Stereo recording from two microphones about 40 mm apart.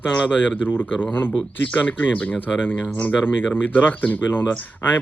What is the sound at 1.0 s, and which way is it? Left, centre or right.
Speech, left.